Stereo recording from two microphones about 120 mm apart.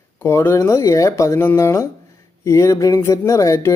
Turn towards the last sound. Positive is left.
turn(degrees=25)  # may be behind; listen again after turning